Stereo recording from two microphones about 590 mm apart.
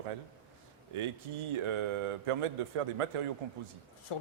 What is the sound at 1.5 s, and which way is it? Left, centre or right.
A man's voice, right.